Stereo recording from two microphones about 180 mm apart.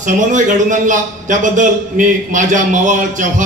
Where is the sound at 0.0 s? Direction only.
45° right (ahead or behind).